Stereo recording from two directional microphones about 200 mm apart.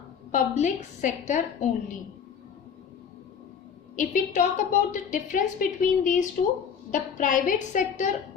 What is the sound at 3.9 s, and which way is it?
A woman's voice, 40° left (ahead or behind).